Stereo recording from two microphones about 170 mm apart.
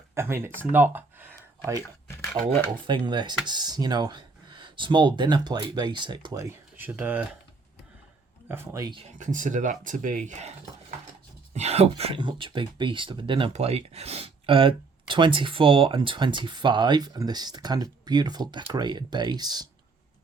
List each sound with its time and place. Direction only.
0.1 s speech: 15° right (ahead or behind)
3.0 s speech: 25° right (ahead or behind); by 7.3 s 10° right (ahead or behind)
8.4 s speech: 15° right (ahead or behind)
9.1 s speech: 50° right (ahead or behind)
11.5 s speech: 40° right (ahead or behind)